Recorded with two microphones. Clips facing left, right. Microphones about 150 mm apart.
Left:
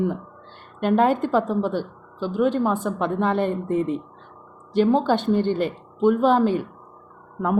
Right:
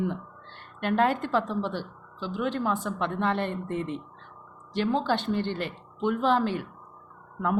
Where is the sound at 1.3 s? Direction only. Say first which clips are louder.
Left 6 dB; 45° left (ahead or behind).